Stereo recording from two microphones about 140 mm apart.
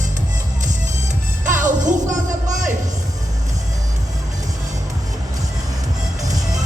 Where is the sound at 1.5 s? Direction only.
65° right (ahead or behind).